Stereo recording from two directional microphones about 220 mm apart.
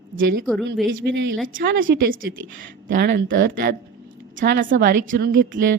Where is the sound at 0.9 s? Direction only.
55° right (ahead or behind).